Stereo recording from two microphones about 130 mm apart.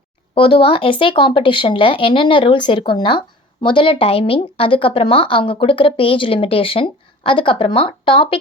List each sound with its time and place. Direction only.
0.3 s speech: 45° left (ahead or behind)